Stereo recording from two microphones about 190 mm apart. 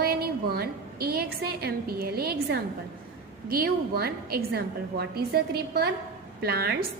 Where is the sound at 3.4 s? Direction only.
55° right (ahead or behind).